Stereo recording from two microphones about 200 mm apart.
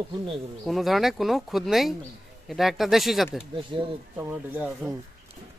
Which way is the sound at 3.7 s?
25° right (ahead or behind).